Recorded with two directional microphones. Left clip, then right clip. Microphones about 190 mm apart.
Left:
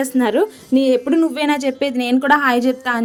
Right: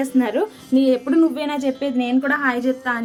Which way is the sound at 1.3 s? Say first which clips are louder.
Left 4 dB; 35° left (ahead or behind).